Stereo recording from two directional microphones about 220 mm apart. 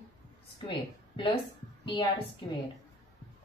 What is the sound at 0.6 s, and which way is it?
Speech, 25° left (ahead or behind).